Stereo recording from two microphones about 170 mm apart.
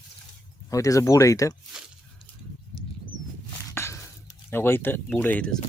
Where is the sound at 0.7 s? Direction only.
20° left (ahead or behind).